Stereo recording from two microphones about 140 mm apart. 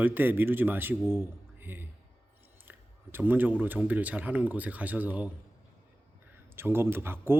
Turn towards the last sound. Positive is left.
turn(degrees=-15)  # may be behind; listen again after turning